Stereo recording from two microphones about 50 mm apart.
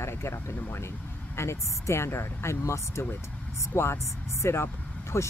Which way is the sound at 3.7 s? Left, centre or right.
Left.